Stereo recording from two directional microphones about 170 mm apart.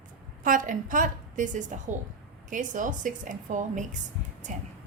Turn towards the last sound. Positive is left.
turn(degrees=-45)  # may be behind; listen again after turning